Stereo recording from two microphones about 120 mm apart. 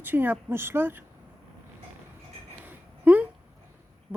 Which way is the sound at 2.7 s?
15° right (ahead or behind).